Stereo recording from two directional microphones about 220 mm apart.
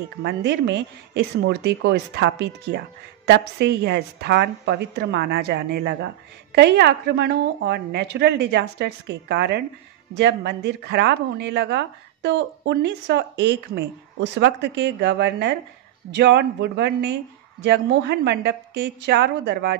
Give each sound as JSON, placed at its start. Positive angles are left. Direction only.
{"t": 0.2, "sound": "speech", "side_deg": -50}